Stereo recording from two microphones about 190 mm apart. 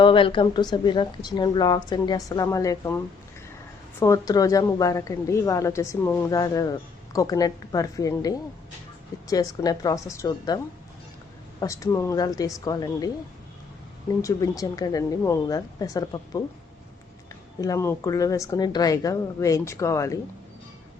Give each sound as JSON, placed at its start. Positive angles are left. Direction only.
{"t": 0.0, "sound": "a woman's voice", "side_deg": 25}
{"t": 4.0, "sound": "a woman's voice", "side_deg": 15}
{"t": 11.6, "sound": "a woman's voice", "side_deg": 15}
{"t": 14.2, "sound": "a woman's voice", "side_deg": 15}
{"t": 17.6, "sound": "a woman's voice", "side_deg": 15}